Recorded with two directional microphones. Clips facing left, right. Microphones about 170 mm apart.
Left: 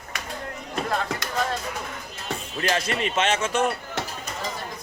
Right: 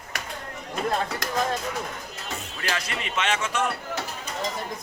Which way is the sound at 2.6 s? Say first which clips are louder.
Left 7 dB; 30° left (ahead or behind).